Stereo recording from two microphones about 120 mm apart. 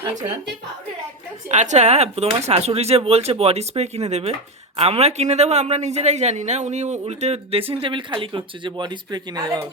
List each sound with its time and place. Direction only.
1.5 s a man's voice: 80° right
7.0 s speech: 65° right (ahead or behind); by 9.6 s 35° right (ahead or behind)